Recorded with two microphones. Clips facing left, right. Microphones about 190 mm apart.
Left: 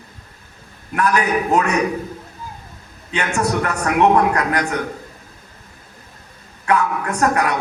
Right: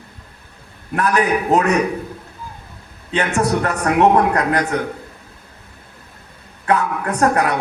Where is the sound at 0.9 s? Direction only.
30° right (ahead or behind).